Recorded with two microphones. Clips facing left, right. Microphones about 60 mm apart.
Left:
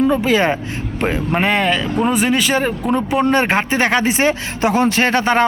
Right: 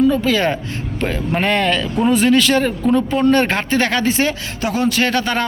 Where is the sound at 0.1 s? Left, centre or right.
Left.